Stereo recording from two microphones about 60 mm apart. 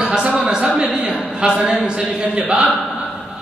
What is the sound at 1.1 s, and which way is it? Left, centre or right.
Speech, centre.